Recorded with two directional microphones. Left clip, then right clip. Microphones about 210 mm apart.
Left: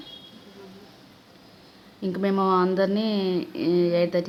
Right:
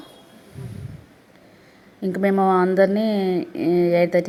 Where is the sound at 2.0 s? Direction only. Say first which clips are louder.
Right 5 dB; 15° right (ahead or behind).